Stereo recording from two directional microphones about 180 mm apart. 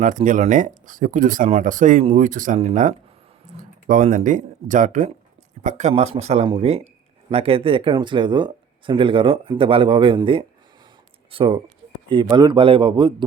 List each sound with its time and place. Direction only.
0.0 s speech: 45° right (ahead or behind); by 13.2 s 30° right (ahead or behind)